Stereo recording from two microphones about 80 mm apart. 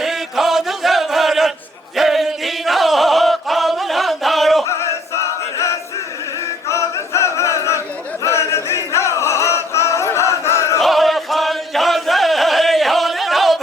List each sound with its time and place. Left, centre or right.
0.0 s chant: centre
2.0 s music: centre
5.1 s choir: left
8.2 s singing: left
10.8 s chant: centre